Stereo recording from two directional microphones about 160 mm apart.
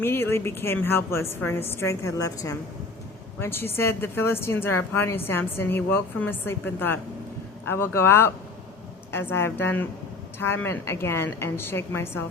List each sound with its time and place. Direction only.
0.0 s a woman's voice: 15° left (ahead or behind)